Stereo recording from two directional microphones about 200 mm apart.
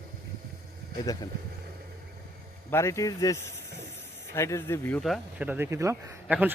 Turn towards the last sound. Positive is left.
turn(degrees=-10)  # may be behind; listen again after turning